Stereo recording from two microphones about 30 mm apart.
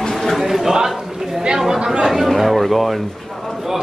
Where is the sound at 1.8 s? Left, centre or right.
Right.